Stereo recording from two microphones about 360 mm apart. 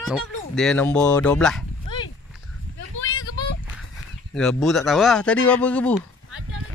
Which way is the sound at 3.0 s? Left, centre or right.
Left.